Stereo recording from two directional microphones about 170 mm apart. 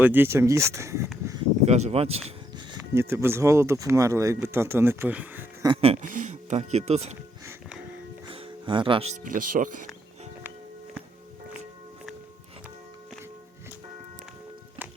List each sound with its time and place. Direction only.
0.0 s speech: 10° right (ahead or behind)
1.6 s speech: 40° right (ahead or behind)
2.9 s speech: 15° right (ahead or behind)
5.6 s speech: 35° right (ahead or behind)
8.3 s music: 30° right (ahead or behind)
9.2 s speech: 50° right (ahead or behind)